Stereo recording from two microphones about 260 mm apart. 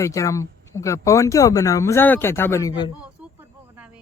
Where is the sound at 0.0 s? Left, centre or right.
Centre.